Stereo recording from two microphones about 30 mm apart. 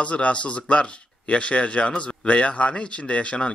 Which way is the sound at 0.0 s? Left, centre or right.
Left.